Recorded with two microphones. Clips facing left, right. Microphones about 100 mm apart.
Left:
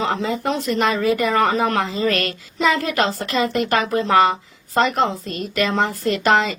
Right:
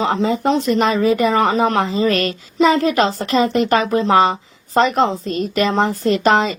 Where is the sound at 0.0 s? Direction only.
25° right (ahead or behind).